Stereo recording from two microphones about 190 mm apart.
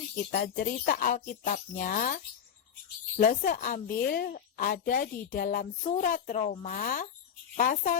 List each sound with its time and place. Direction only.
0.3 s a woman's voice: 50° left (ahead or behind)